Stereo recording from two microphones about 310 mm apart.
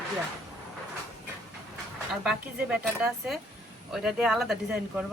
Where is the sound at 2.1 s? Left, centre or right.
Centre.